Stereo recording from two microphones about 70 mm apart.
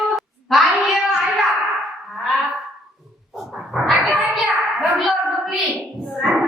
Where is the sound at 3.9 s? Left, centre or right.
Centre.